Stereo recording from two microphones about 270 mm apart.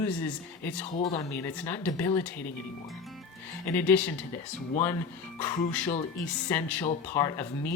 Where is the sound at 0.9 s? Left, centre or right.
Left.